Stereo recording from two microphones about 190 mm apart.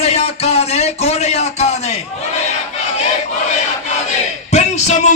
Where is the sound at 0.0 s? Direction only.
35° left (ahead or behind).